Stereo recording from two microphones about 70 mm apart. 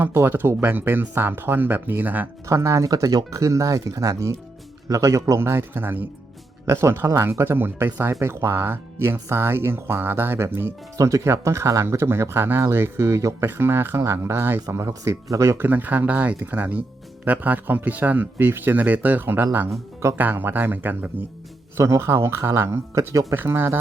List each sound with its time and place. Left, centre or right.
0.0 s speech: right
2.5 s speech: right
5.4 s speech: right
8.2 s speech: right
10.9 s speech: right
15.5 s speech: right
21.8 s speech: right